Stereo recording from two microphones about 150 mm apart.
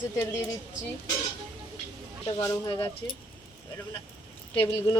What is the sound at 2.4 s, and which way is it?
Speech, 25° left (ahead or behind).